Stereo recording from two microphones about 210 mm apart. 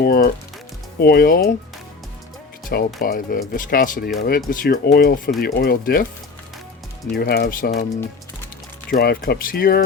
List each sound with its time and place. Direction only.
0.0 s speech: 45° left (ahead or behind)
2.6 s speech: 40° left (ahead or behind)
7.1 s speech: 50° left (ahead or behind)
8.9 s speech: 45° left (ahead or behind)